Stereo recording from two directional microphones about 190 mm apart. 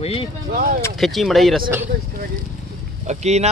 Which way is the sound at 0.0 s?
30° left (ahead or behind).